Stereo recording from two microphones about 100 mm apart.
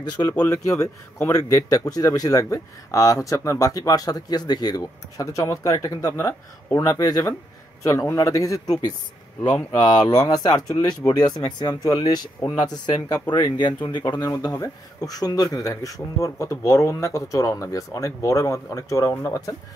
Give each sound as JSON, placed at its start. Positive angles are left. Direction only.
{"t": 0.5, "sound": "a man's voice", "side_deg": 30}
{"t": 9.5, "sound": "speech", "side_deg": 10}
{"t": 10.0, "sound": "a man's voice", "side_deg": 35}